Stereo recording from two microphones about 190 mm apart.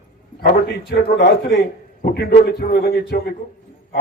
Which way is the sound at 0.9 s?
55° left (ahead or behind).